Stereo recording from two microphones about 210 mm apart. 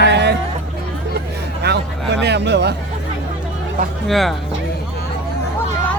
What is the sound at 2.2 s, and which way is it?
Speech, 55° right (ahead or behind).